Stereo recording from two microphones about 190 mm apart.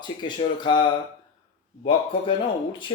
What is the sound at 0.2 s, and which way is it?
Speech, 25° left (ahead or behind).